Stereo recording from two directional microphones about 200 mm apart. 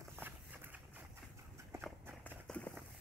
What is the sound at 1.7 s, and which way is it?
Walk, 5° right (ahead or behind).